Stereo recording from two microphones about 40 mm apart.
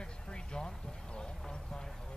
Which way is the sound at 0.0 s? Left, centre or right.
Left.